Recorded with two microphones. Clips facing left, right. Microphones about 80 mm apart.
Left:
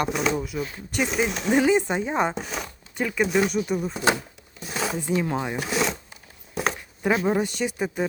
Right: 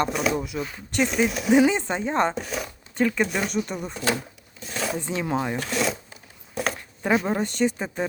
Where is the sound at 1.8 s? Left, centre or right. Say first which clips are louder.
Even; centre.